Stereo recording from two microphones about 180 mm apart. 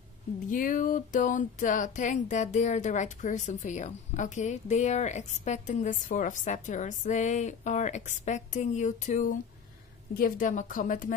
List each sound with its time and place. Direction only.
0.5 s speech: 45° left (ahead or behind)